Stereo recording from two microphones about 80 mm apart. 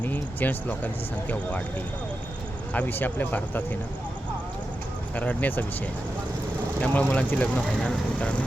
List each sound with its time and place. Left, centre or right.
0.0 s speech: left
2.7 s speech: left
5.1 s speech: centre